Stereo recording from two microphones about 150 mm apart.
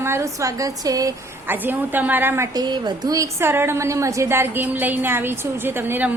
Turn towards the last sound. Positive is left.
turn(degrees=-15)  # may be behind; listen again after turning